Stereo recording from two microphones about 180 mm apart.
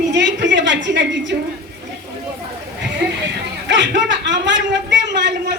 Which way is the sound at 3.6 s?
80° right.